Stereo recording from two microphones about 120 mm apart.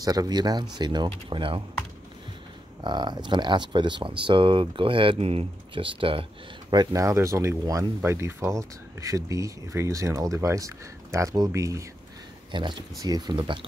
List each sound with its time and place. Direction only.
0.0 s speech: 30° right (ahead or behind)
2.8 s speech: 40° right (ahead or behind)
6.7 s speech: 35° right (ahead or behind)
12.4 s speech: 40° right (ahead or behind)